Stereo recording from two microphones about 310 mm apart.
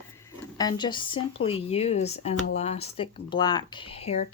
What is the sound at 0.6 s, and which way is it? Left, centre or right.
Speech, centre.